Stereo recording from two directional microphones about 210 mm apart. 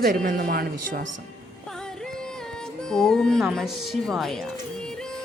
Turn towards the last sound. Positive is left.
turn(degrees=0)  # may be behind; listen again after turning